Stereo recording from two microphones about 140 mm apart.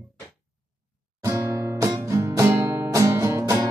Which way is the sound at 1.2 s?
20° right (ahead or behind).